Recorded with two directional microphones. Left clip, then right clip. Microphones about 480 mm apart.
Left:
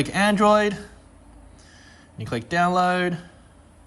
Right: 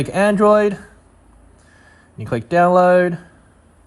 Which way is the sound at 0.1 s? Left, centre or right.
Centre.